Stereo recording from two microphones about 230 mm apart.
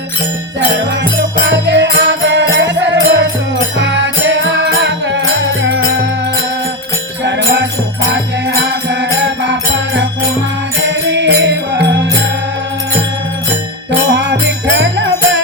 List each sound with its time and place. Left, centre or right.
1.5 s music: right
8.1 s music: right
10.8 s music: right
14.8 s music: right